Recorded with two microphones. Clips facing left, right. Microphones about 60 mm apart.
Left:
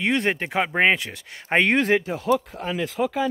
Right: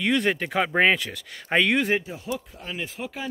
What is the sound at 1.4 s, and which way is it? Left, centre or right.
Speech, left.